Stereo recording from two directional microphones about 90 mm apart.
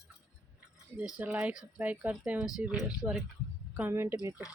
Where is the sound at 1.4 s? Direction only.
10° right (ahead or behind).